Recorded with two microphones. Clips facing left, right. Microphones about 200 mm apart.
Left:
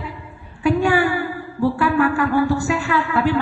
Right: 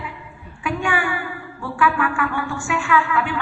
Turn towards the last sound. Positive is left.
turn(degrees=35)  # may be behind; listen again after turning